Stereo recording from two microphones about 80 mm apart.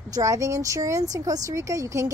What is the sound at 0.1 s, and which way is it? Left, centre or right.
Speech, right.